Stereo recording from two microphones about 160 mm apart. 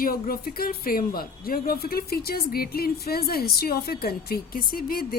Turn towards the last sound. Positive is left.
turn(degrees=65)  # may be behind; listen again after turning